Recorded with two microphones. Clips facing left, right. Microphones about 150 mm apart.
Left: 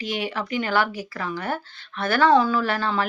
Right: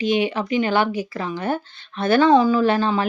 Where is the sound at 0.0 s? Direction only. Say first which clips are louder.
Right 7 dB; 20° right (ahead or behind).